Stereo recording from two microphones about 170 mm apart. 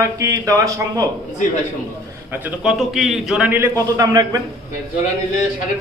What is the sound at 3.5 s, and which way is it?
Speech, 15° right (ahead or behind).